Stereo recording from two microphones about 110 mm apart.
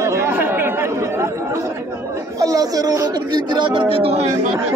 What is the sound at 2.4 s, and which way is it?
Speech, 35° right (ahead or behind).